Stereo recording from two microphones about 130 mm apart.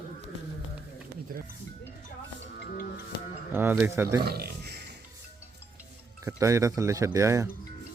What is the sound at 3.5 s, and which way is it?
Speech, 15° right (ahead or behind).